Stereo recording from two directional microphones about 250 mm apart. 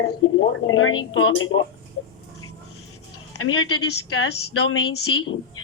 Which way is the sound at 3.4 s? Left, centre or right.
Left.